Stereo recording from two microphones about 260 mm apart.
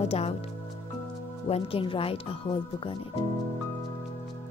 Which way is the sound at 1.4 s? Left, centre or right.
Left.